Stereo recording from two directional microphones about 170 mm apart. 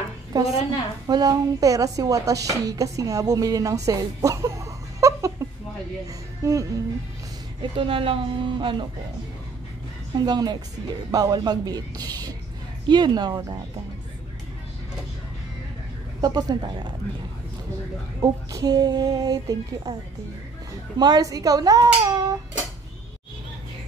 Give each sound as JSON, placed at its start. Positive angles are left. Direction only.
{"t": 0.3, "sound": "a woman's voice", "side_deg": -20}
{"t": 2.4, "sound": "music", "side_deg": -20}
{"t": 6.4, "sound": "a woman's voice", "side_deg": -20}
{"t": 7.6, "sound": "speech", "side_deg": -30}
{"t": 10.1, "sound": "a woman's voice", "side_deg": -25}
{"t": 16.2, "sound": "a woman's voice", "side_deg": -25}
{"t": 18.2, "sound": "a woman's voice", "side_deg": -20}
{"t": 21.0, "sound": "a woman's voice", "side_deg": -20}